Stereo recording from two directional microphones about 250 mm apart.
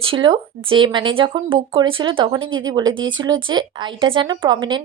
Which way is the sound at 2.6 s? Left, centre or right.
Centre.